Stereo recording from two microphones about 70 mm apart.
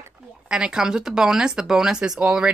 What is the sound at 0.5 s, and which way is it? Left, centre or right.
Speech, centre.